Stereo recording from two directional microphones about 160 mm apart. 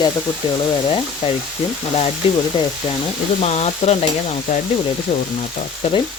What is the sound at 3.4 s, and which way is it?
Stir, 40° left (ahead or behind).